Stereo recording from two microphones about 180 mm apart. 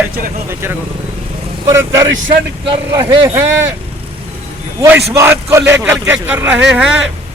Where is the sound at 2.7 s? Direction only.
30° right (ahead or behind).